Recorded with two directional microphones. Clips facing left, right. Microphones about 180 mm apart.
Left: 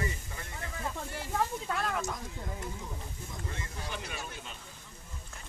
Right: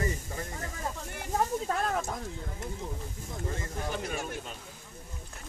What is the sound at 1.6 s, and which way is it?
Speech, 40° right (ahead or behind).